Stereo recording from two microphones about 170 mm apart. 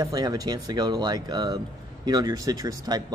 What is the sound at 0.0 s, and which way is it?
Speech, 25° right (ahead or behind).